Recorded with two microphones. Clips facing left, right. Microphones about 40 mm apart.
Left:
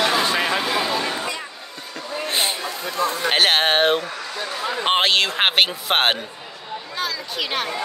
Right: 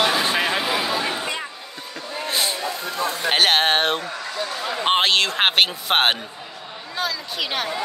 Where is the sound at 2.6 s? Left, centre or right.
Centre.